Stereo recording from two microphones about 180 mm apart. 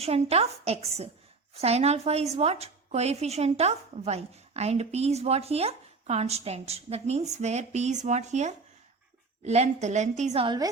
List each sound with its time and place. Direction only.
0.0 s a woman's voice: 35° right (ahead or behind)
10.4 s a woman's voice: 25° right (ahead or behind)